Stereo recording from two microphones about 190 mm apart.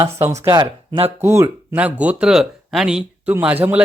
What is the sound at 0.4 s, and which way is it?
Speech, 25° right (ahead or behind).